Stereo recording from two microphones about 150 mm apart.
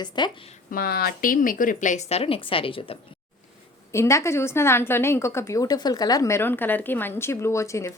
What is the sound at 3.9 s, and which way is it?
A woman's voice, 20° left (ahead or behind).